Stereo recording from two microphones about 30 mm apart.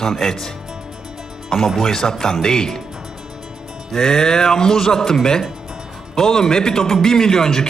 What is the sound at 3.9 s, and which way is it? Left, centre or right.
A man's voice, centre.